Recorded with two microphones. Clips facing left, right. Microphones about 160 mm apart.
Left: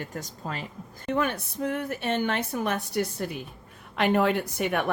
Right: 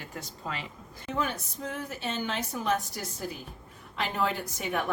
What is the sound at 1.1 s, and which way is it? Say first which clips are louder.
A woman's voice: left 5 dB; 65° left (ahead or behind).